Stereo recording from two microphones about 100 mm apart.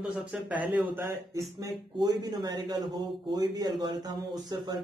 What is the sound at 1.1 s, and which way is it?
A man's voice, 30° right (ahead or behind).